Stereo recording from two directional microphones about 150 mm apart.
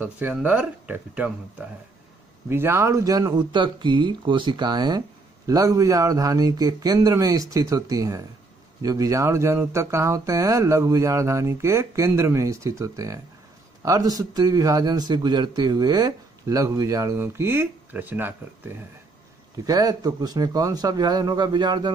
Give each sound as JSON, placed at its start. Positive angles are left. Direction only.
{"t": 0.0, "sound": "speech", "side_deg": -10}
{"t": 2.5, "sound": "a man's voice", "side_deg": -15}
{"t": 19.6, "sound": "a man's voice", "side_deg": -25}